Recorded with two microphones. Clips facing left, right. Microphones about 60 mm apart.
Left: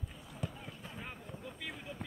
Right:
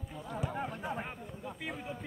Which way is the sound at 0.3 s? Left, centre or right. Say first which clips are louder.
Right 9 dB; right.